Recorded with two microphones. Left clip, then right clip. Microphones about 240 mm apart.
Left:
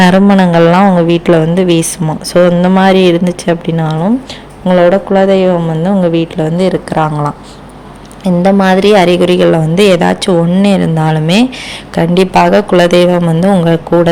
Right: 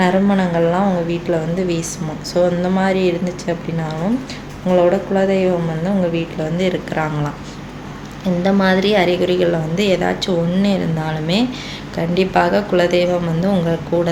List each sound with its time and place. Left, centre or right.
0.0 s a woman's voice: left